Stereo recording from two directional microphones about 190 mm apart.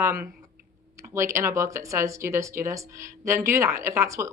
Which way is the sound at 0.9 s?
15° right (ahead or behind).